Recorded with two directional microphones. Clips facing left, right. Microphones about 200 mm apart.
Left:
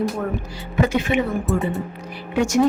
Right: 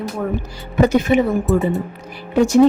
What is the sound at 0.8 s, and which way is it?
Speech, 40° right (ahead or behind).